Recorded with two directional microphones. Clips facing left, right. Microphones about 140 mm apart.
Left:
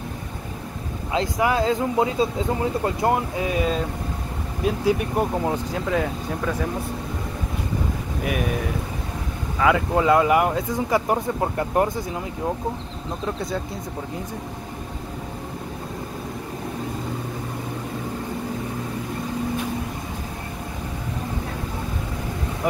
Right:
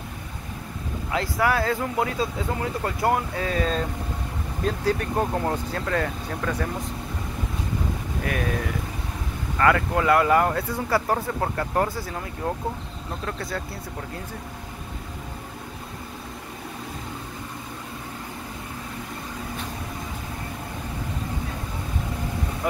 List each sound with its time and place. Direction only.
1.1 s speech: 20° left (ahead or behind)
8.2 s speech: 10° left (ahead or behind)
9.6 s speech: 15° left (ahead or behind)
13.2 s speech: 20° left (ahead or behind)